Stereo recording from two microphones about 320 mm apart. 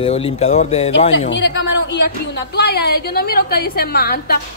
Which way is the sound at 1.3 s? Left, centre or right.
Left.